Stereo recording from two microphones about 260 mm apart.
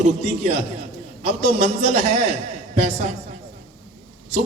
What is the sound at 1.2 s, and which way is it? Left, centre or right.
A man's voice, right.